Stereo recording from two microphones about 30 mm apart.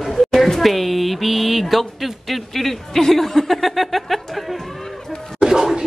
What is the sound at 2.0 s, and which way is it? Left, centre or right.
Speech, centre.